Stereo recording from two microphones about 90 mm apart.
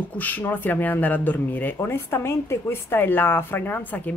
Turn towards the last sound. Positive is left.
turn(degrees=20)  # may be behind; listen again after turning